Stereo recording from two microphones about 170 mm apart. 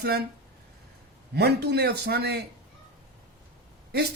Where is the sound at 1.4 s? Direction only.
75° right (ahead or behind).